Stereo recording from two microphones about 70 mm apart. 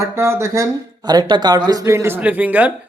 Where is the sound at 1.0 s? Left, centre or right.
Right.